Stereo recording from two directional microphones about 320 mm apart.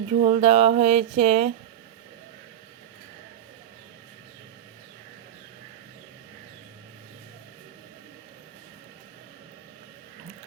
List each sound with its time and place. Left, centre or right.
0.1 s speech: centre